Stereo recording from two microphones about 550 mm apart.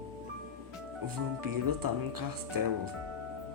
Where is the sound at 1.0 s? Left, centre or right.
Right.